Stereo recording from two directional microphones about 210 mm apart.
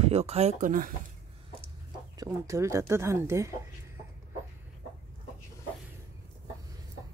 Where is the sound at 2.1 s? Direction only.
15° right (ahead or behind).